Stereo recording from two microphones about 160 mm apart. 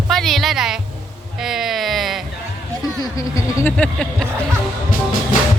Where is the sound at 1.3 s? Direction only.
Centre (ahead or behind).